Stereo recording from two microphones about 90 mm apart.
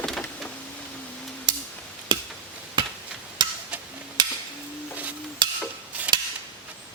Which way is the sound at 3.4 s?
60° right (ahead or behind).